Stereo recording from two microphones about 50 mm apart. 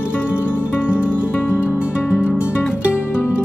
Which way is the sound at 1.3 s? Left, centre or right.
Left.